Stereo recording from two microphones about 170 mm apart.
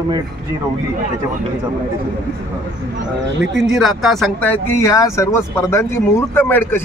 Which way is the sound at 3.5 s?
Centre (ahead or behind).